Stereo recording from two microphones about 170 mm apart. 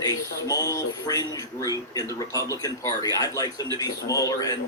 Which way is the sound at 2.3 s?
20° left (ahead or behind).